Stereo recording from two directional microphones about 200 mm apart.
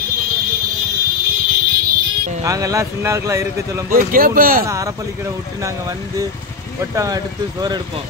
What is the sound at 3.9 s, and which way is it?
Speech, 45° right (ahead or behind).